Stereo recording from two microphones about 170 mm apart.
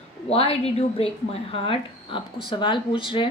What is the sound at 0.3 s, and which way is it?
A woman's voice, 35° left (ahead or behind).